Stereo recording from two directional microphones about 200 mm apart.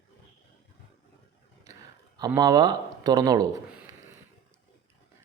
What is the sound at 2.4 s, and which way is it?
Speech, 20° right (ahead or behind).